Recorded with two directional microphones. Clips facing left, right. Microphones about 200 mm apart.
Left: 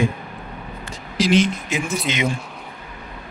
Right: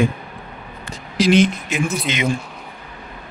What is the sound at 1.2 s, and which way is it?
Speech, 60° right (ahead or behind).